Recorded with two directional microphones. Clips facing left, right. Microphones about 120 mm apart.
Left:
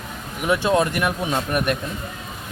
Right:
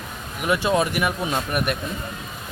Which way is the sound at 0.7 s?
10° right (ahead or behind).